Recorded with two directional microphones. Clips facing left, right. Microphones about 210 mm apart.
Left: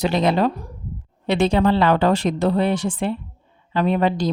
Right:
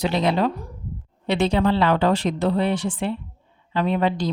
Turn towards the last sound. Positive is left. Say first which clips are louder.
# left 2 dB
turn(degrees=45)  # may be behind; listen again after turning